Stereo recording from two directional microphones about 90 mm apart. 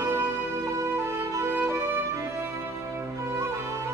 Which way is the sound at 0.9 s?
25° right (ahead or behind).